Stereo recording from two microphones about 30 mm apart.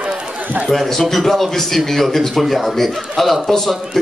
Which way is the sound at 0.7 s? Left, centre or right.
Centre.